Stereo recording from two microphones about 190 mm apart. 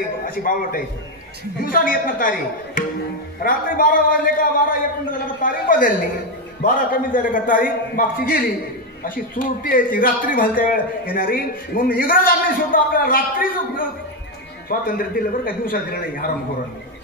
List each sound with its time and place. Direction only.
0.2 s a man's voice: 45° left (ahead or behind)